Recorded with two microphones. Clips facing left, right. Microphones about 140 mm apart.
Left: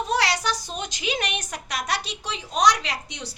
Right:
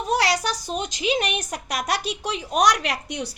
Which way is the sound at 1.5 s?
40° right (ahead or behind).